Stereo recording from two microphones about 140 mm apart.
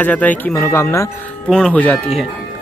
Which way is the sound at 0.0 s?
10° left (ahead or behind).